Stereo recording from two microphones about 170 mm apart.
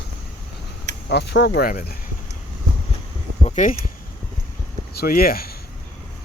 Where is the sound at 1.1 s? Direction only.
80° left.